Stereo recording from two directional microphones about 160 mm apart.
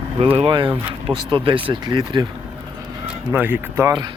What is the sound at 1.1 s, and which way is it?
Speech, 30° right (ahead or behind).